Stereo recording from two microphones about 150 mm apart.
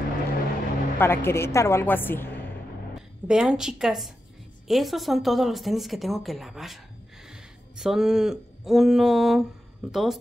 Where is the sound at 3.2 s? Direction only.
5° right (ahead or behind).